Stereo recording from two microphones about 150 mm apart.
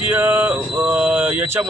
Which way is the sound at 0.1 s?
10° right (ahead or behind).